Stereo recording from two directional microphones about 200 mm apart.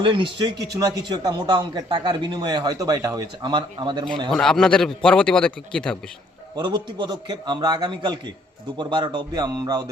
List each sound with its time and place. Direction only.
0.0 s speech: 25° right (ahead or behind)
4.3 s a man's voice: centre (ahead or behind)
6.6 s speech: 25° right (ahead or behind)